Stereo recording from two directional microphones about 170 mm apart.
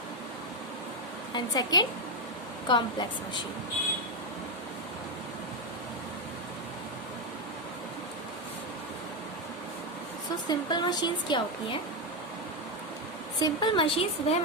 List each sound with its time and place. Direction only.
1.3 s speech: 25° left (ahead or behind)
10.5 s speech: 25° left (ahead or behind)
13.4 s a woman's voice: 25° left (ahead or behind)